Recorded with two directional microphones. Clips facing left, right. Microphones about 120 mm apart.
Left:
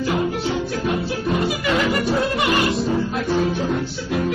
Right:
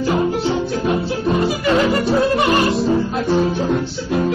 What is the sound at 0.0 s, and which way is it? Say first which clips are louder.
Music: right 4 dB; 30° right (ahead or behind).